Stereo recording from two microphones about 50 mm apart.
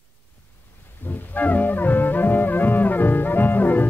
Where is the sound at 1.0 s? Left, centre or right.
Left.